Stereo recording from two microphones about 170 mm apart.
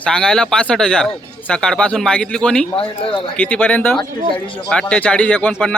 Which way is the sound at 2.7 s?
30° left (ahead or behind).